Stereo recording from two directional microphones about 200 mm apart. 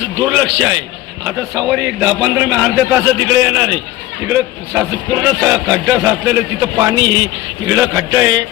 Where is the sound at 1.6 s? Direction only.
Centre (ahead or behind).